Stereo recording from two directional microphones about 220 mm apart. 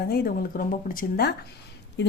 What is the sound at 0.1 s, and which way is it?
Speech, 45° left (ahead or behind).